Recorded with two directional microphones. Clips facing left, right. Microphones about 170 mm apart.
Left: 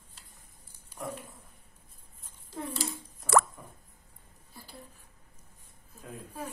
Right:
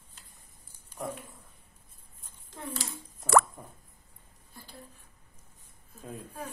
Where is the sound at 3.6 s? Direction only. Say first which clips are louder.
Right 2 dB; 30° right (ahead or behind).